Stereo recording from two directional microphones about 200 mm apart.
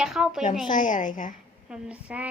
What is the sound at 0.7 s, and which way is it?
Speech, 40° left (ahead or behind).